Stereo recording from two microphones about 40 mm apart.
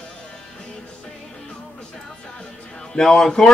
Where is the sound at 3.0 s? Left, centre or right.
Centre.